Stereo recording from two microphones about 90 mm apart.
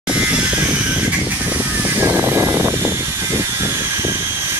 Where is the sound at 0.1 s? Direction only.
10° right (ahead or behind); by 4.2 s 30° right (ahead or behind).